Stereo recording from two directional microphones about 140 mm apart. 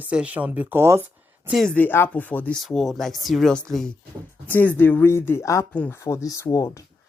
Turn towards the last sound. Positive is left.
turn(degrees=25)  # may be behind; listen again after turning